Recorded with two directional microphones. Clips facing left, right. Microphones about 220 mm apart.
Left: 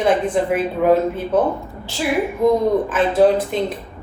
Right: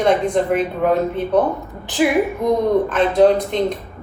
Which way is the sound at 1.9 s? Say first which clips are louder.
Right 8 dB; 15° right (ahead or behind).